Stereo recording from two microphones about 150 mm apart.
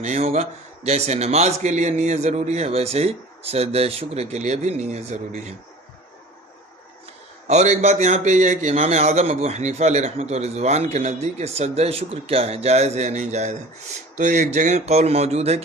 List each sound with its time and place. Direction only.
0.0 s a man's voice: 45° right (ahead or behind)
7.4 s a man's voice: 50° right (ahead or behind)